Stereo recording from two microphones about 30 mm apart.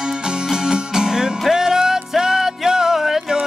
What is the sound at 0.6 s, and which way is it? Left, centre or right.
Music, right.